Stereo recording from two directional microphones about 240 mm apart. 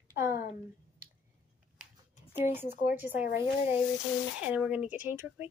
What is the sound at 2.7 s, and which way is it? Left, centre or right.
Speech, left.